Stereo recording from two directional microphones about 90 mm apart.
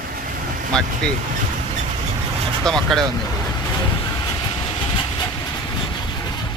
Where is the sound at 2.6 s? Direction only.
5° left (ahead or behind).